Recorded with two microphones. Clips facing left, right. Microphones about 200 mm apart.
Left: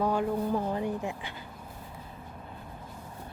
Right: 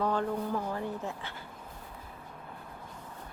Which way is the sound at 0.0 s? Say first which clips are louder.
Left 3 dB; 10° left (ahead or behind).